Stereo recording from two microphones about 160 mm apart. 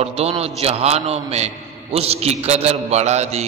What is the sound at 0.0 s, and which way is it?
A man's voice, 40° right (ahead or behind).